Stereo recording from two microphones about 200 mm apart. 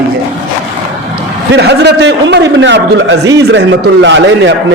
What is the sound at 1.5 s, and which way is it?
A man's voice, 55° right (ahead or behind).